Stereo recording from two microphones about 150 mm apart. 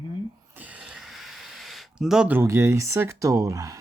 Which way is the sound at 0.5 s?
10° right (ahead or behind).